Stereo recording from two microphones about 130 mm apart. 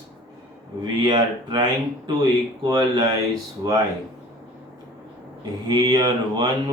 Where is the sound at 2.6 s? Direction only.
35° right (ahead or behind).